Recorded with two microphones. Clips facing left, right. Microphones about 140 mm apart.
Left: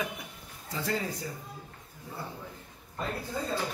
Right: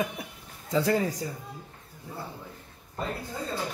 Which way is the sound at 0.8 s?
60° right (ahead or behind).